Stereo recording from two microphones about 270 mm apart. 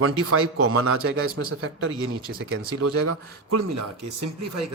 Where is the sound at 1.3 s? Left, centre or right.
Right.